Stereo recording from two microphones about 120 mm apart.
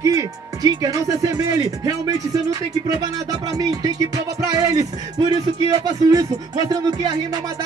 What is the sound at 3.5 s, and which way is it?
Speech, 30° right (ahead or behind).